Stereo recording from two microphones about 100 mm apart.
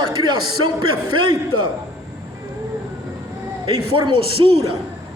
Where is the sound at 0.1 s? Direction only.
40° right (ahead or behind).